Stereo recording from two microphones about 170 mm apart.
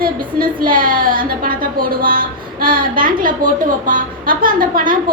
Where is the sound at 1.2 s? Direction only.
55° right (ahead or behind).